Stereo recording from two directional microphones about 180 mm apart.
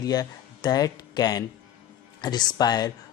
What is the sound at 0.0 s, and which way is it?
A man's voice, 20° left (ahead or behind).